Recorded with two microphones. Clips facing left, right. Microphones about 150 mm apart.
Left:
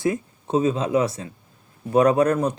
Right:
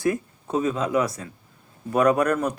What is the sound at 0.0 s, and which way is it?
Speech, 25° left (ahead or behind).